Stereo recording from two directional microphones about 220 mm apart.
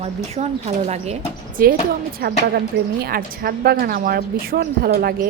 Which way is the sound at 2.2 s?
45° right (ahead or behind).